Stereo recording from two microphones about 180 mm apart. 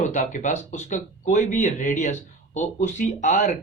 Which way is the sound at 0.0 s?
40° left (ahead or behind).